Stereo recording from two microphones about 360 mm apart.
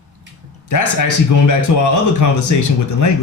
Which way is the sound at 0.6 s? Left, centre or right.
Left.